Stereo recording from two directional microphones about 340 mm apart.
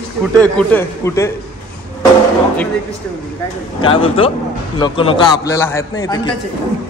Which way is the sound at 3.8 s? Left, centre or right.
Centre.